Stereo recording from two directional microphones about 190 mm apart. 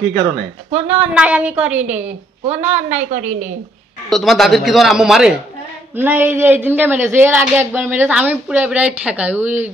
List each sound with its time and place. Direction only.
0.7 s a woman's voice: 35° right (ahead or behind)
1.1 s speech: 5° right (ahead or behind)
2.4 s a woman's voice: 40° right (ahead or behind)
4.1 s a man's voice: centre (ahead or behind)